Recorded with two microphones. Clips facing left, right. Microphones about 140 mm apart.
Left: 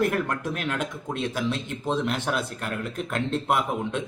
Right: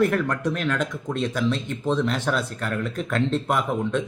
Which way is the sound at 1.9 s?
10° left (ahead or behind).